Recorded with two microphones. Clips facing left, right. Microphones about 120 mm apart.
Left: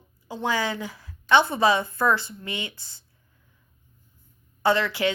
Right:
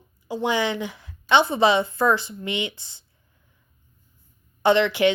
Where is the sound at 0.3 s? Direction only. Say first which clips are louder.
Right 3 dB; 15° right (ahead or behind).